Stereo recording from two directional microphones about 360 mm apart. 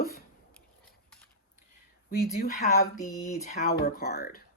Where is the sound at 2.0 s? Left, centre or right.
Left.